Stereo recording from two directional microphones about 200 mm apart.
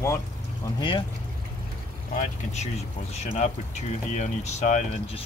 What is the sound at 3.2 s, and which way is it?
Speech, 35° left (ahead or behind).